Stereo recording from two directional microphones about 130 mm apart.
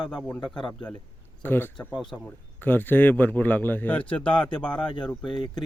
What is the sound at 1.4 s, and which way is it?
A man's voice, 15° left (ahead or behind).